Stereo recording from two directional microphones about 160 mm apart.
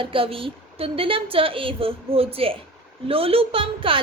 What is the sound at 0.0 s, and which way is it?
A woman's voice, 35° right (ahead or behind).